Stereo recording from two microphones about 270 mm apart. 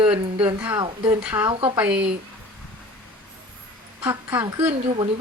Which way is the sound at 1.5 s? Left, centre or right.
Centre.